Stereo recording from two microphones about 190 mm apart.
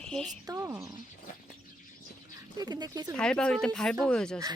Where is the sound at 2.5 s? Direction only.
20° right (ahead or behind).